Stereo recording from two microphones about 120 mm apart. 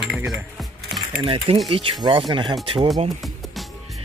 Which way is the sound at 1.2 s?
50° right (ahead or behind).